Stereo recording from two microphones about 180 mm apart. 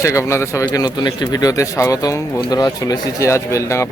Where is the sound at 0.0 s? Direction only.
15° left (ahead or behind).